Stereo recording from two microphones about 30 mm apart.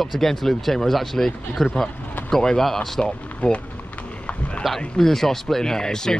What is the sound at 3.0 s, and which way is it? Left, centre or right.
Speech, left.